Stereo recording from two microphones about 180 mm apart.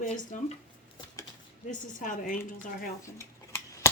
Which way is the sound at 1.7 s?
45° left (ahead or behind).